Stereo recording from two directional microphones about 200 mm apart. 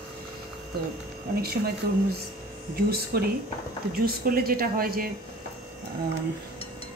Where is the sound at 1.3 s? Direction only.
50° right (ahead or behind).